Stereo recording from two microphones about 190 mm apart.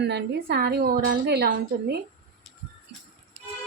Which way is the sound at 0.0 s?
60° right (ahead or behind).